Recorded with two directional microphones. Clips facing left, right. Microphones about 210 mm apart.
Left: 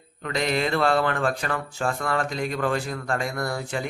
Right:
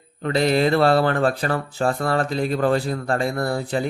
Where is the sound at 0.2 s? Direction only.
35° right (ahead or behind).